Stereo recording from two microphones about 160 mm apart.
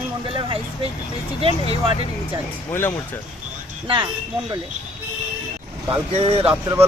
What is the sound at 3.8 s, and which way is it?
Speech, 30° right (ahead or behind).